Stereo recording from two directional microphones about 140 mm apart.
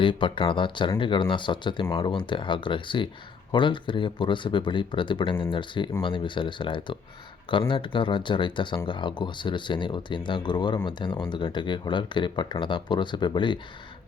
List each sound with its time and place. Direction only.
0.0 s speech: 35° left (ahead or behind)